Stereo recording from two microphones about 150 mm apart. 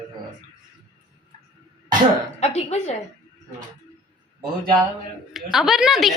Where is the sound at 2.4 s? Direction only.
45° left (ahead or behind).